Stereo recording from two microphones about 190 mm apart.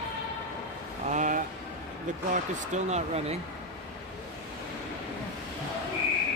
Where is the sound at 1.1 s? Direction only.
40° right (ahead or behind).